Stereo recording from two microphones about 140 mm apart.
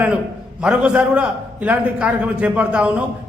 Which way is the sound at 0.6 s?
5° right (ahead or behind).